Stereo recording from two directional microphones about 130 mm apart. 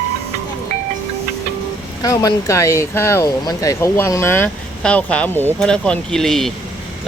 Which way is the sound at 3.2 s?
30° left (ahead or behind).